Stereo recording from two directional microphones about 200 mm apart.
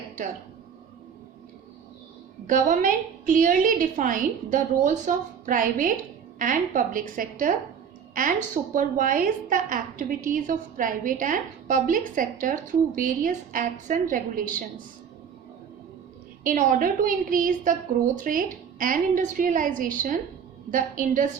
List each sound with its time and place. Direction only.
2.5 s a woman's voice: 40° right (ahead or behind)
8.7 s a woman's voice: 40° right (ahead or behind)
16.4 s a woman's voice: 40° right (ahead or behind)